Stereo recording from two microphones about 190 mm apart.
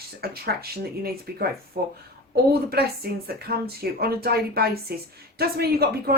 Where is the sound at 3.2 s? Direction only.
55° right (ahead or behind).